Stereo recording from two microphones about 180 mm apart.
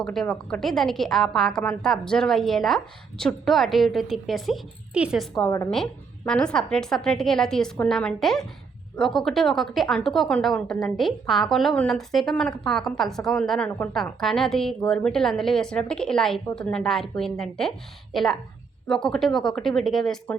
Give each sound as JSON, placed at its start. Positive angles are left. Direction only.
{"t": 0.0, "sound": "speech", "side_deg": 0}
{"t": 5.4, "sound": "a woman's voice", "side_deg": 20}
{"t": 5.7, "sound": "speech", "side_deg": 5}